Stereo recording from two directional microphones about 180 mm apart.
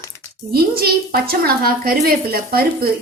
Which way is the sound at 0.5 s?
60° right (ahead or behind).